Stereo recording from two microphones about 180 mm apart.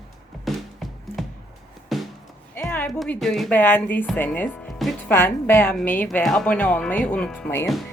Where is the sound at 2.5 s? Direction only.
10° left (ahead or behind).